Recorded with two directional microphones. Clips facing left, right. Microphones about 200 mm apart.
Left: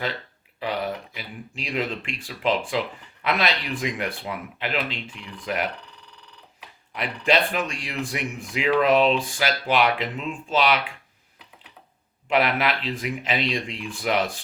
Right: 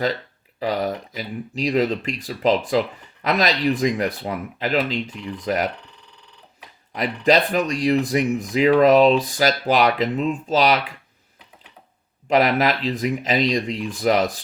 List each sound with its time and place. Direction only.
0.6 s speech: 40° right (ahead or behind)
6.9 s speech: 40° right (ahead or behind)
12.3 s speech: 40° right (ahead or behind)